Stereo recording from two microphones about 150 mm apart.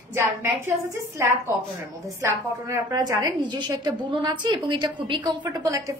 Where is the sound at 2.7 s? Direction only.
25° right (ahead or behind).